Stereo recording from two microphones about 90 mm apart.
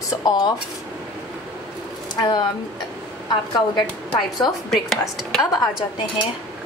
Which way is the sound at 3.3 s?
55° left (ahead or behind).